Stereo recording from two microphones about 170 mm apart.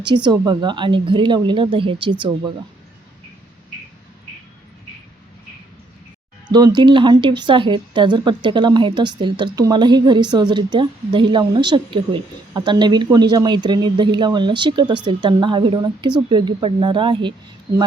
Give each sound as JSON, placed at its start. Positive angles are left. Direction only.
{"t": 0.0, "sound": "a woman's voice", "side_deg": -25}
{"t": 6.5, "sound": "a woman's voice", "side_deg": -25}